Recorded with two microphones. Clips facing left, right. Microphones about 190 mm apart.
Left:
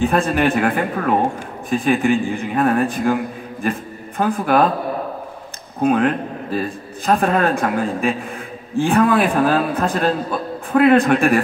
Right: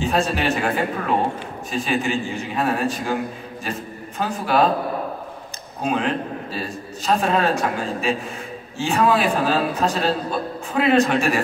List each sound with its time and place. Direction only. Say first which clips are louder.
0.0 s a man's voice: left 4 dB; 55° left (ahead or behind)
5.8 s a man's voice: left 6 dB; 55° left (ahead or behind)